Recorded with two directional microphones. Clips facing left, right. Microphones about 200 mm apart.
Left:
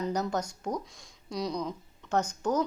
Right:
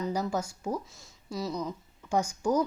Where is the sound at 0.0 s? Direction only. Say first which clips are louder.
Even; 5° right (ahead or behind).